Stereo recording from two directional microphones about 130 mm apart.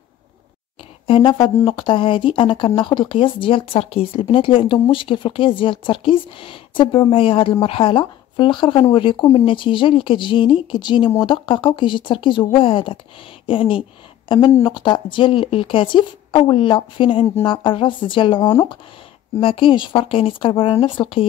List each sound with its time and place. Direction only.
1.0 s speech: 40° left (ahead or behind)